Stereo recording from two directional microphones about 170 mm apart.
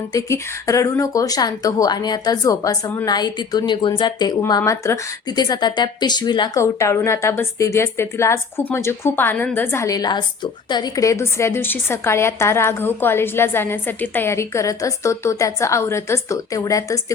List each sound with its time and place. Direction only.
0.1 s speech: 20° left (ahead or behind)